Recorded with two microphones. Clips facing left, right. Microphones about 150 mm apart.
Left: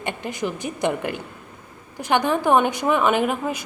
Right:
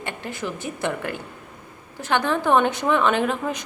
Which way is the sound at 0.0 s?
15° left (ahead or behind).